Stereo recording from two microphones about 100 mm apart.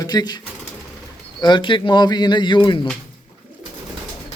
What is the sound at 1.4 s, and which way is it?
Speech, 50° left (ahead or behind).